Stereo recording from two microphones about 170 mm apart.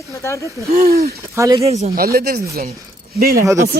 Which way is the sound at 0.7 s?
60° right (ahead or behind).